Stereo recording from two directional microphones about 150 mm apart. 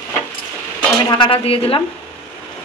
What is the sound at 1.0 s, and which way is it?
Speech, 35° left (ahead or behind).